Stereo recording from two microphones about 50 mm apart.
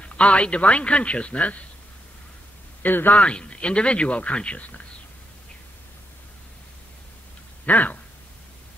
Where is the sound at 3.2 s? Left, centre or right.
Left.